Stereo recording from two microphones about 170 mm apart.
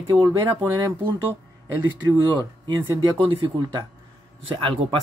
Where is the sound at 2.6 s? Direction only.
30° right (ahead or behind).